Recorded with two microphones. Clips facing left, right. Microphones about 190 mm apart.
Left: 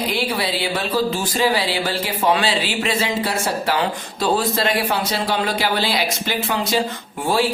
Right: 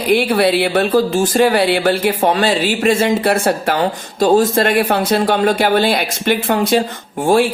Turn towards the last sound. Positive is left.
turn(degrees=-50)  # may be behind; listen again after turning